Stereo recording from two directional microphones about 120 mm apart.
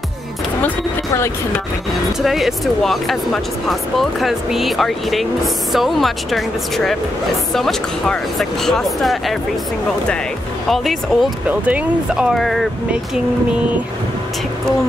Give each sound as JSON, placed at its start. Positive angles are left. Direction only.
{"t": 0.6, "sound": "speech", "side_deg": 20}
{"t": 2.2, "sound": "speech", "side_deg": 0}
{"t": 10.7, "sound": "speech", "side_deg": 0}